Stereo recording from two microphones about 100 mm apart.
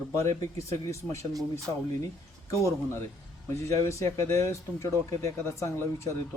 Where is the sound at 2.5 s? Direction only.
30° left (ahead or behind).